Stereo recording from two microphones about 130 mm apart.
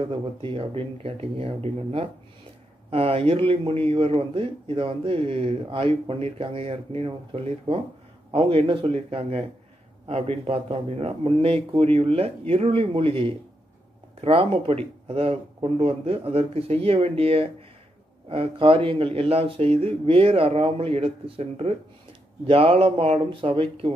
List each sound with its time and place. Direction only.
0.0 s a man's voice: 40° right (ahead or behind)